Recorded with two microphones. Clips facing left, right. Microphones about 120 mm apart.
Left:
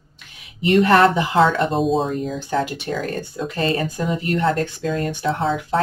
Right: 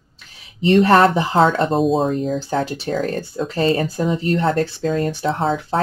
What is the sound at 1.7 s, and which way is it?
Speech, centre (ahead or behind).